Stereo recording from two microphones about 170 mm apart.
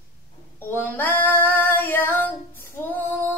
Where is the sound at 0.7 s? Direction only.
10° left (ahead or behind).